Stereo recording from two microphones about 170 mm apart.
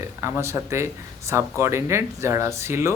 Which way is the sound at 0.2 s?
15° right (ahead or behind).